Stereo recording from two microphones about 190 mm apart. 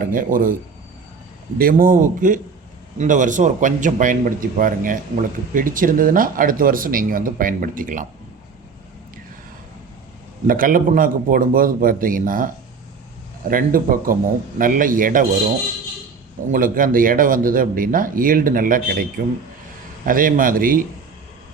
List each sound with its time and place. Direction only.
0.0 s speech: 45° right (ahead or behind)
1.5 s speech: 50° right (ahead or behind)
10.4 s speech: 45° right (ahead or behind)
13.5 s speech: 45° right (ahead or behind)
16.5 s speech: 45° right (ahead or behind)